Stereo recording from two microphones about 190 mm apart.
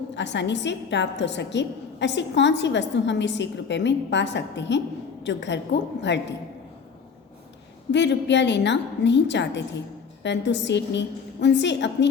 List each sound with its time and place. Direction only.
0.2 s a woman's voice: 70° left (ahead or behind)
7.9 s a woman's voice: 65° left (ahead or behind)